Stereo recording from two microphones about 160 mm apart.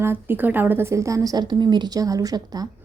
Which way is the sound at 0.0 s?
15° right (ahead or behind).